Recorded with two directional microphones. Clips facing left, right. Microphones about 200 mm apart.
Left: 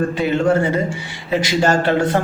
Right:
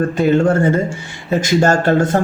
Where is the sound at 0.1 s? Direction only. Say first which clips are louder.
Right 3 dB; 45° right (ahead or behind).